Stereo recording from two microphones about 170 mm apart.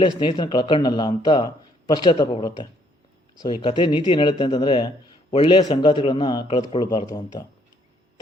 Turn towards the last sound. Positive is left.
turn(degrees=25)  # may be behind; listen again after turning